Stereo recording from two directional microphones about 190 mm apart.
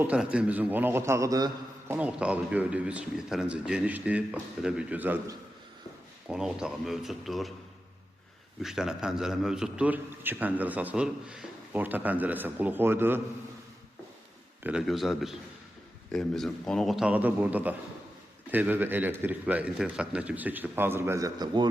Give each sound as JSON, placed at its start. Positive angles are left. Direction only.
{"t": 0.0, "sound": "a man's voice", "side_deg": -5}
{"t": 1.9, "sound": "a man's voice", "side_deg": -5}
{"t": 6.2, "sound": "a man's voice", "side_deg": -5}
{"t": 8.6, "sound": "a man's voice", "side_deg": 0}
{"t": 14.6, "sound": "a man's voice", "side_deg": -5}